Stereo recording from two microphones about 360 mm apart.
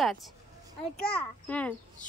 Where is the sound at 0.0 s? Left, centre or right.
Centre.